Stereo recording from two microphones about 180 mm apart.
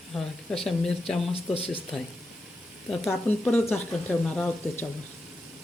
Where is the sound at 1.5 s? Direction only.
30° left (ahead or behind).